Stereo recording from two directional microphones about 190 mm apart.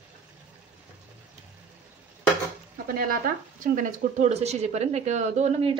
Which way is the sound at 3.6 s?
45° right (ahead or behind).